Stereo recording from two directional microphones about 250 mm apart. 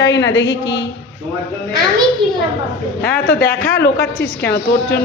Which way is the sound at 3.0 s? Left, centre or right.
Left.